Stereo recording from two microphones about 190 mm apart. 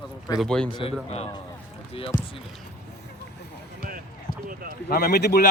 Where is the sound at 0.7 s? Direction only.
30° left (ahead or behind).